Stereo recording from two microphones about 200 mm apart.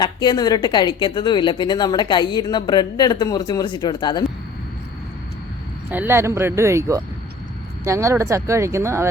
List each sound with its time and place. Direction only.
0.0 s speech: 20° left (ahead or behind)
5.9 s speech: 10° right (ahead or behind)